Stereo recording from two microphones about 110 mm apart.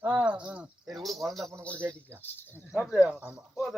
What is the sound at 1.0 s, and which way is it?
Speech, centre (ahead or behind).